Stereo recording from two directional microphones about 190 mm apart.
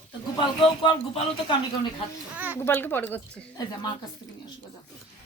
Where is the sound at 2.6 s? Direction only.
10° left (ahead or behind).